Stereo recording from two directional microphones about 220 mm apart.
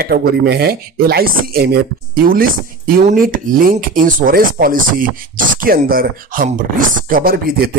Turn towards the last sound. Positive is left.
turn(degrees=-40)  # may be behind; listen again after turning